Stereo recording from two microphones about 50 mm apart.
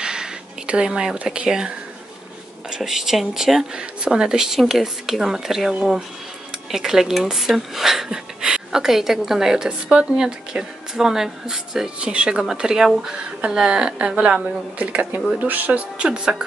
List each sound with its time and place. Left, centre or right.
0.0 s a sound: centre
1.1 s a woman's voice: right
2.7 s speech: centre
3.7 s a woman's voice: centre; by 15.8 s right
16.0 s a woman's voice: centre